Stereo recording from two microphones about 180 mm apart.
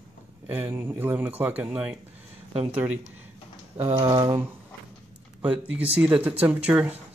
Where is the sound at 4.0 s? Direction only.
25° right (ahead or behind).